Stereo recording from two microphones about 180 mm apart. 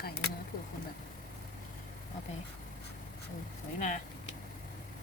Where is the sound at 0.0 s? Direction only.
65° left (ahead or behind).